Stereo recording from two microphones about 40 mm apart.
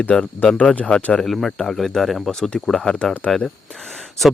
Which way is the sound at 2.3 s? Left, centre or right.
Centre.